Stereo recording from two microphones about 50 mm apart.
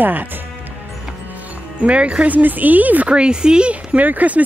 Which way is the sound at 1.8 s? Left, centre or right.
Right.